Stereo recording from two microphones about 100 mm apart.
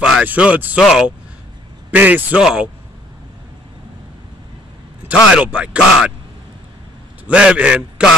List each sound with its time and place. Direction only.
0.2 s speech: 15° right (ahead or behind)
1.9 s speech: 15° right (ahead or behind)
5.1 s speech: 10° right (ahead or behind)
7.2 s speech: 10° right (ahead or behind)